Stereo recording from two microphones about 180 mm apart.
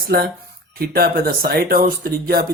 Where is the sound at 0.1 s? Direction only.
60° right (ahead or behind).